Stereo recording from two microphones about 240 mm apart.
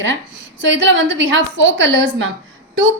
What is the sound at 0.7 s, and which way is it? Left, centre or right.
A woman's voice, right.